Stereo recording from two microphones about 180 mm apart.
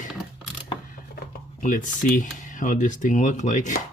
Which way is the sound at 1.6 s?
45° left (ahead or behind).